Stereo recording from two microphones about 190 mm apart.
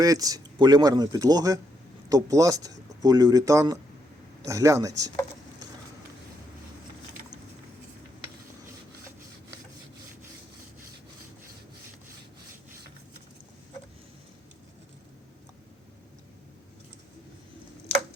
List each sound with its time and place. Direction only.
0.0 s speech: 20° right (ahead or behind)